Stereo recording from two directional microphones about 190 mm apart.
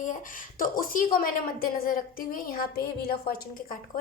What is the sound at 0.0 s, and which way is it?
A woman's voice, 45° left (ahead or behind).